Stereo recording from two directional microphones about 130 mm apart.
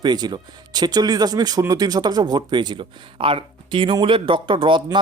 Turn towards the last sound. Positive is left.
turn(degrees=-40)  # may be behind; listen again after turning